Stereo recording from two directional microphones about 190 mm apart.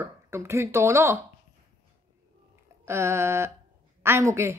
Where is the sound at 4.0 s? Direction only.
15° right (ahead or behind).